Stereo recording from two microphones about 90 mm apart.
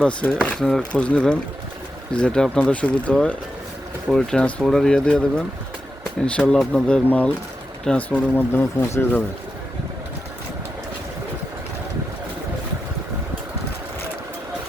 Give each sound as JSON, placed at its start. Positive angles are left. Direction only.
{"t": 0.0, "sound": "speech", "side_deg": 15}
{"t": 6.2, "sound": "speech", "side_deg": 15}